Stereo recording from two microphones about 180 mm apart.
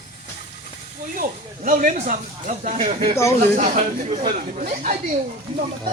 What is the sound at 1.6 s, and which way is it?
Speech, 45° right (ahead or behind).